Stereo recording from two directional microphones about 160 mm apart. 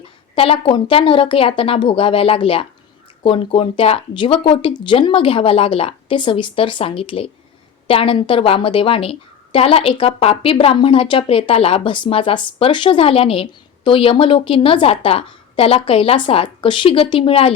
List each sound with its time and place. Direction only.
0.3 s a woman's voice: 35° left (ahead or behind)